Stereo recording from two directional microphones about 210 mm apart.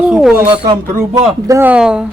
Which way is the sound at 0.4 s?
25° right (ahead or behind).